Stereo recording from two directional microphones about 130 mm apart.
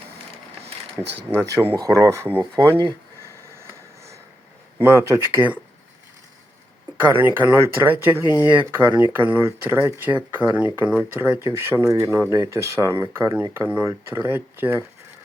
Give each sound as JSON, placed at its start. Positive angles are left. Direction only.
{"t": 1.7, "sound": "speech", "side_deg": -25}
{"t": 4.8, "sound": "speech", "side_deg": -20}
{"t": 7.0, "sound": "speech", "side_deg": -15}